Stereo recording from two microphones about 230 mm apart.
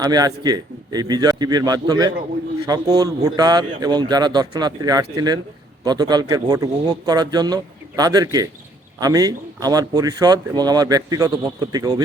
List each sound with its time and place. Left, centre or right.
0.0 s speech: centre